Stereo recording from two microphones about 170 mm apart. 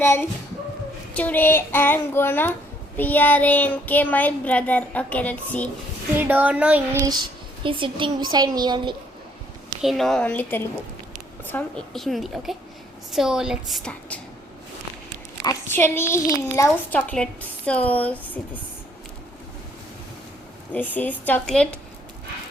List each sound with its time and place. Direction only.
0.0 s a child's voice: 15° left (ahead or behind)
6.1 s speech: 10° right (ahead or behind)
6.9 s a child's voice: 25° right (ahead or behind)
9.8 s a child's voice: centre (ahead or behind)
15.4 s a child's voice: 15° left (ahead or behind)
20.7 s a child's voice: 10° left (ahead or behind)